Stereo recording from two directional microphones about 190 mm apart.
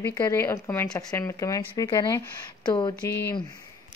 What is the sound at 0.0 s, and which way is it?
Speech, 15° left (ahead or behind).